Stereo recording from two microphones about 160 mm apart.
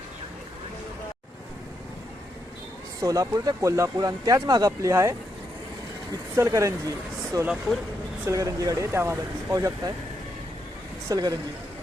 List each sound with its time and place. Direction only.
3.0 s speech: 20° right (ahead or behind)
6.3 s speech: 15° right (ahead or behind)
7.4 s speech: centre (ahead or behind)
8.2 s speech: 20° right (ahead or behind)
11.1 s speech: 25° right (ahead or behind)